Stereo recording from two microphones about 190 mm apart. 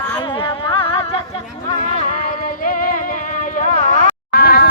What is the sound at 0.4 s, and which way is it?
Music, 30° left (ahead or behind).